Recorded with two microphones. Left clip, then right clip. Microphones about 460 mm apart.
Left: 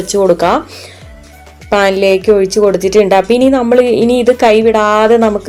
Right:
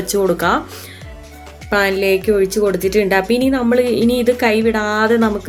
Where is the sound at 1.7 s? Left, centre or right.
Right.